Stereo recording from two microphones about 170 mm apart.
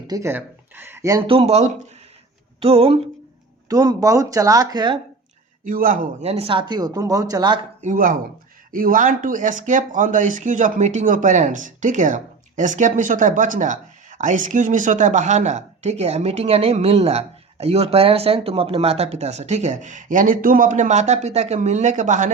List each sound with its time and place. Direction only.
0.1 s speech: 15° right (ahead or behind)
1.3 s speech: 35° right (ahead or behind)
3.7 s speech: 20° right (ahead or behind)
5.6 s speech: 55° right (ahead or behind); by 7.6 s 25° right (ahead or behind)
7.8 s speech: 50° right (ahead or behind)